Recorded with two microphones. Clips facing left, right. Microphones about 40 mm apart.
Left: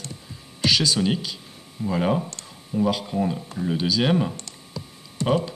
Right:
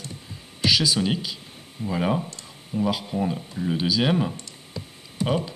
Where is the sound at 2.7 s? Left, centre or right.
Right.